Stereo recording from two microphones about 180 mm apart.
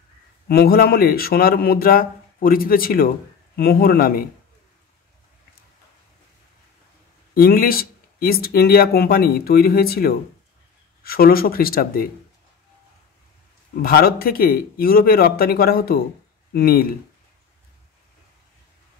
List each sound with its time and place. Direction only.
0.5 s speech: 55° left (ahead or behind)
7.3 s speech: 55° left (ahead or behind)
13.8 s speech: 55° left (ahead or behind)